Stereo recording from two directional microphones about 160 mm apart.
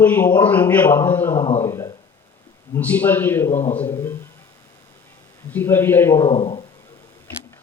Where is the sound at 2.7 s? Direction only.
10° left (ahead or behind).